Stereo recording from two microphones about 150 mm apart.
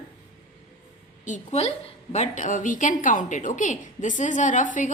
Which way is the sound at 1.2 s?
50° left (ahead or behind).